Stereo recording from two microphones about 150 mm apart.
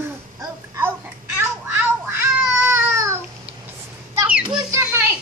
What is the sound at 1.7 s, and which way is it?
Babbling, 15° right (ahead or behind).